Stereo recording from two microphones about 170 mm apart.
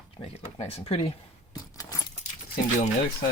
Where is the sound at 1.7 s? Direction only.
20° left (ahead or behind).